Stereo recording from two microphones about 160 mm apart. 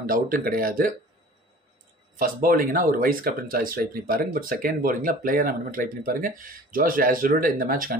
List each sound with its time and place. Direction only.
0.0 s speech: 60° right (ahead or behind)
2.1 s speech: 60° right (ahead or behind)